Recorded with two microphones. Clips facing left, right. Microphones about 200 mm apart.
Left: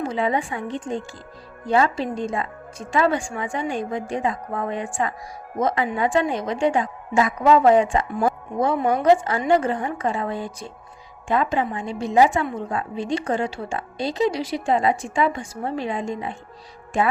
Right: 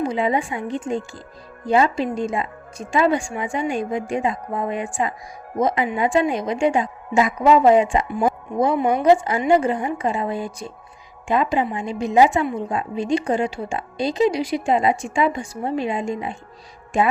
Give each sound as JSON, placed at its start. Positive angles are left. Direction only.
{"t": 0.0, "sound": "a woman's voice", "side_deg": -15}